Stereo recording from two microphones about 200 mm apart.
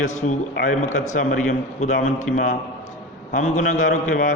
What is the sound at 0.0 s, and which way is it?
A man's voice, 35° left (ahead or behind).